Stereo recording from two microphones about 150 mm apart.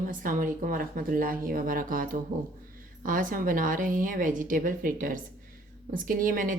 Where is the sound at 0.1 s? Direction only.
65° right (ahead or behind).